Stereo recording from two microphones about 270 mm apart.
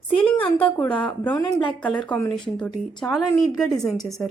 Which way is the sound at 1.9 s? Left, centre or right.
Centre.